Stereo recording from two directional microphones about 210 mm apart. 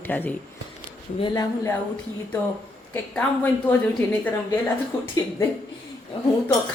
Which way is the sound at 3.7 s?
5° left (ahead or behind).